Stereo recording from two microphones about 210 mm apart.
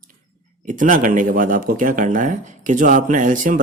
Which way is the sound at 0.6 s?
40° right (ahead or behind).